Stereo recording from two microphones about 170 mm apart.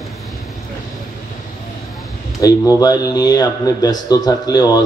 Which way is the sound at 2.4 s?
20° left (ahead or behind).